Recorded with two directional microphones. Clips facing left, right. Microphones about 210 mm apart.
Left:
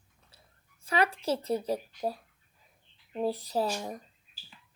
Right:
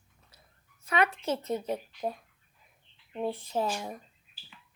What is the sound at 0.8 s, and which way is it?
A woman's voice, 30° left (ahead or behind).